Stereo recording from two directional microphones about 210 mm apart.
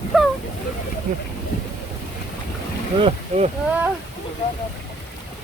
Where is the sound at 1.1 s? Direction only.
40° right (ahead or behind).